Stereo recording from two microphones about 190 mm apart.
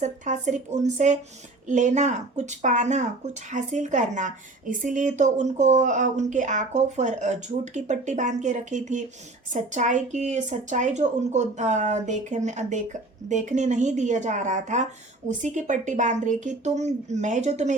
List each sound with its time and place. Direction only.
0.0 s a woman's voice: 40° right (ahead or behind)